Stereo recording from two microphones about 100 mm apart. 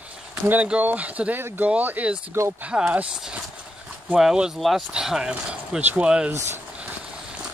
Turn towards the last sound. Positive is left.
turn(degrees=-10)  # may be behind; listen again after turning